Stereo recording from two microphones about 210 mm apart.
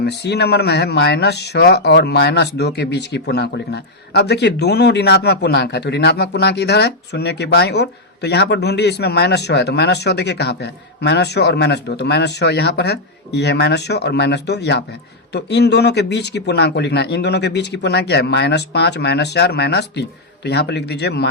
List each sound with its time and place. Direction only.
0.0 s speech: 55° left (ahead or behind)